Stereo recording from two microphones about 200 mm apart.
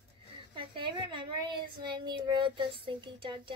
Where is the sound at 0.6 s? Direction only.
25° right (ahead or behind).